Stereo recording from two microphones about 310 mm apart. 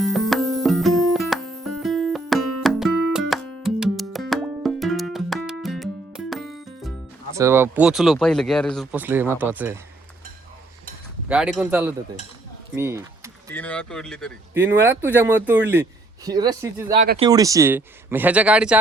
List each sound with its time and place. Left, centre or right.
0.0 s music: centre
7.3 s speech: centre
11.3 s speech: centre
12.7 s a sound: centre
13.5 s speech: centre
16.9 s speech: right
17.2 s speech: centre